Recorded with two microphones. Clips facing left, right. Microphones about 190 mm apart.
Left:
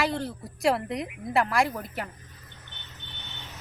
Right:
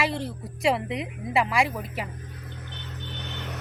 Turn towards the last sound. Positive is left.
turn(degrees=-85)